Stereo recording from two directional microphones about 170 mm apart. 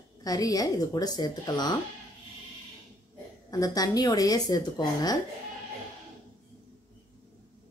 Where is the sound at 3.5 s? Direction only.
20° left (ahead or behind).